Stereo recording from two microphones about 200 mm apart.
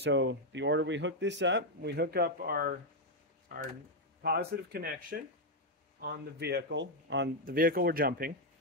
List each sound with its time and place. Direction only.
0.0 s speech: 65° right (ahead or behind); by 2.8 s 50° right (ahead or behind)
4.2 s speech: 50° right (ahead or behind)
7.4 s speech: 45° right (ahead or behind)